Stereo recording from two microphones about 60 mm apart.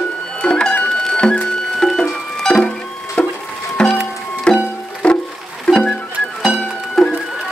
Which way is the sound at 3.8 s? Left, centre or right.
Centre.